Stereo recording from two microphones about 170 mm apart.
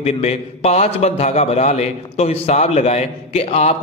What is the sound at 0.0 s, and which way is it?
A man's voice, 40° left (ahead or behind).